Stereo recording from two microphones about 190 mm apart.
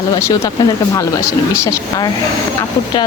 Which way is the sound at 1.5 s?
15° left (ahead or behind).